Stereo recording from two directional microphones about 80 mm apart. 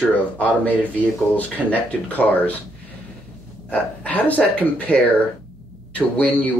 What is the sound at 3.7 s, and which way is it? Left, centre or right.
Speech, centre.